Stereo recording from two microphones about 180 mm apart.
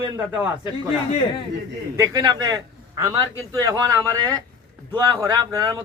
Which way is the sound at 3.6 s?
20° right (ahead or behind).